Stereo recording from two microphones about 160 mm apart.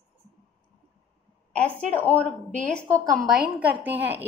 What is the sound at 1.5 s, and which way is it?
Speech, 10° left (ahead or behind).